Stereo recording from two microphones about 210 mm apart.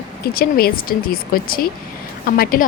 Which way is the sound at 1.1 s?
45° left (ahead or behind).